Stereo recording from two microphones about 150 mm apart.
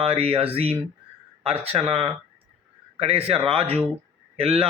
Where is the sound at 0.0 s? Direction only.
40° right (ahead or behind).